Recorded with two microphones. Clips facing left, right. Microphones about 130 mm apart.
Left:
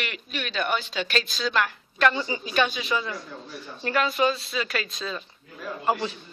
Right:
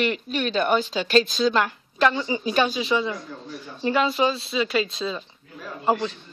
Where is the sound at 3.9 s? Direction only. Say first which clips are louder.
Right 2 dB; 25° right (ahead or behind).